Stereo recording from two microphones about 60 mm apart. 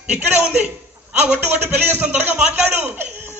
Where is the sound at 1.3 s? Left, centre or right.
Right.